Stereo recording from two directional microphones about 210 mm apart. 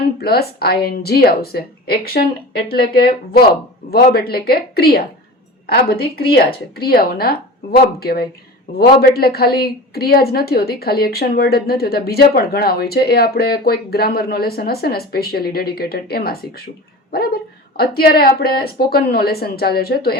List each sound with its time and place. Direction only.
0.2 s a woman's voice: 50° left (ahead or behind)